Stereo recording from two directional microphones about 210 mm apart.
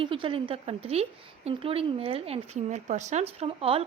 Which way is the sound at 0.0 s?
25° right (ahead or behind).